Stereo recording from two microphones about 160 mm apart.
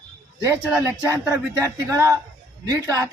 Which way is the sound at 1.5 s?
20° right (ahead or behind).